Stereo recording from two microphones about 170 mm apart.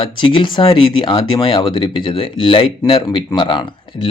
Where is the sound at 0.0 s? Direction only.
30° left (ahead or behind).